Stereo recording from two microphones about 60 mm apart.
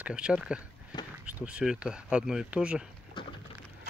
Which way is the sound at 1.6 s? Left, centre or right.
Centre.